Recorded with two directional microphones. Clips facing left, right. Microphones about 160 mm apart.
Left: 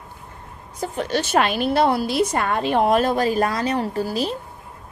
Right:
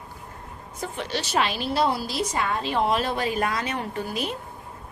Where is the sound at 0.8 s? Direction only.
45° left (ahead or behind).